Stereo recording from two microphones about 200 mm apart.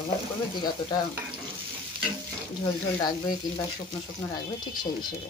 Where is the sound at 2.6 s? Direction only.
20° left (ahead or behind).